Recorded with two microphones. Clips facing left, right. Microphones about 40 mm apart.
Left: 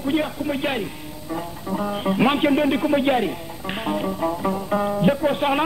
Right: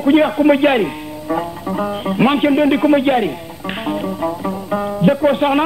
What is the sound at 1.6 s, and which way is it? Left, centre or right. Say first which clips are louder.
Music: right 5 dB; right.